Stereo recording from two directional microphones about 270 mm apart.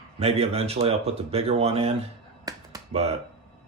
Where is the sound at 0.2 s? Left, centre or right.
Right.